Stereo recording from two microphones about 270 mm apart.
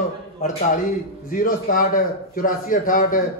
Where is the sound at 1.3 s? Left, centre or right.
Left.